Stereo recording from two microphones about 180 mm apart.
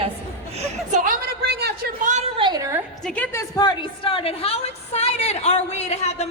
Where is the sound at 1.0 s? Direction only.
55° right (ahead or behind).